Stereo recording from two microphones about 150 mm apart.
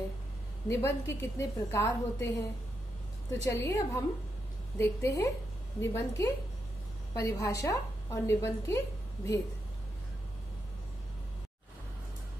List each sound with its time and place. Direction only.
0.7 s a woman's voice: 20° left (ahead or behind)
3.4 s a woman's voice: 20° left (ahead or behind)